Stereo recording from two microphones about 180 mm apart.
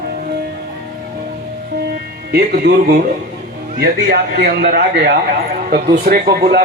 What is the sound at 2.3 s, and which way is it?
A man's voice, 60° right (ahead or behind).